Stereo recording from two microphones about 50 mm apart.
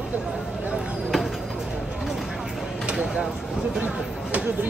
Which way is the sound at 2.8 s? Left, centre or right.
Centre.